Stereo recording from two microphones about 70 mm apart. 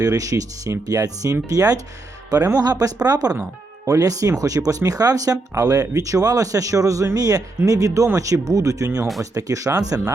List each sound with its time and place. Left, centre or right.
0.0 s speech: right
3.8 s speech: right